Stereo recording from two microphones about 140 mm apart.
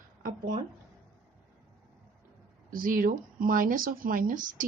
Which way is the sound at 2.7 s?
85° right.